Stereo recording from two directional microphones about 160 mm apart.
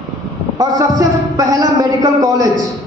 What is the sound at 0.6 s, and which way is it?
A man's voice, 20° right (ahead or behind).